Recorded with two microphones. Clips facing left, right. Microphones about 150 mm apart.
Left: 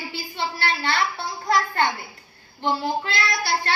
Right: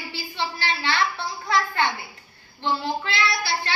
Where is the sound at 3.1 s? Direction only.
45° left (ahead or behind).